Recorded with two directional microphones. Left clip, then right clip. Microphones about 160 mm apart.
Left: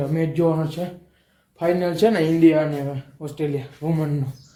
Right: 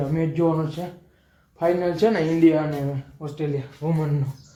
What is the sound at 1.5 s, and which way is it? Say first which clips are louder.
Speech: even; 30° left (ahead or behind).